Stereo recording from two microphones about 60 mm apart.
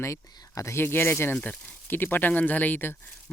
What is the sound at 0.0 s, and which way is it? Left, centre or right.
Speech, left.